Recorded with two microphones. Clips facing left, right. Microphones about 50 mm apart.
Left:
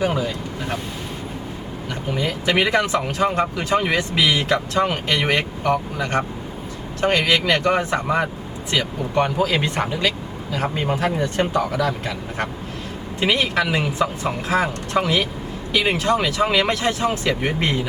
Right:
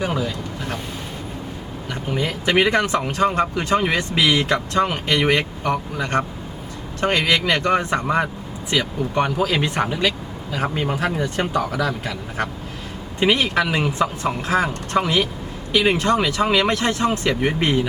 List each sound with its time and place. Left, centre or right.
0.0 s speech: centre
2.1 s speech: centre
2.6 s a man's voice: centre
6.0 s a man's voice: centre
7.3 s speech: centre
11.8 s a man's voice: centre
13.1 s speech: centre